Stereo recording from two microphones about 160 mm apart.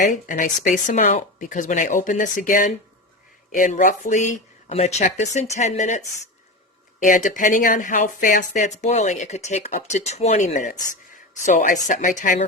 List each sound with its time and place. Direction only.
0.0 s speech: 55° left (ahead or behind)
7.0 s speech: 55° left (ahead or behind)